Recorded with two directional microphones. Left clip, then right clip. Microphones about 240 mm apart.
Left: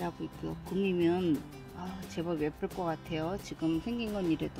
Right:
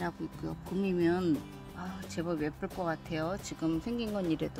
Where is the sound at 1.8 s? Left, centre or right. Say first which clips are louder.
Even; centre.